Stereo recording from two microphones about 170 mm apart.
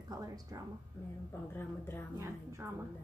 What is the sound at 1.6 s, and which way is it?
Speech, 15° left (ahead or behind).